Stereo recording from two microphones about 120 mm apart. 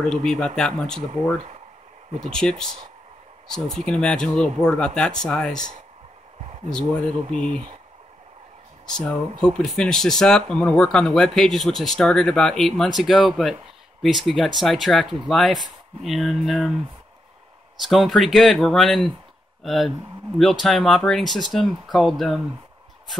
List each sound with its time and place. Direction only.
0.0 s speech: 5° left (ahead or behind)
3.4 s speech: 5° left (ahead or behind)
7.4 s speech: 45° right (ahead or behind)
8.8 s speech: 5° left (ahead or behind)
17.8 s speech: centre (ahead or behind)